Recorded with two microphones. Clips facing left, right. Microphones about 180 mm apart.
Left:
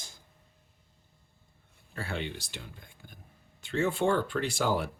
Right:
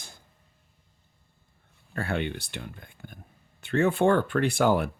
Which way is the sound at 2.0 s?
60° right (ahead or behind).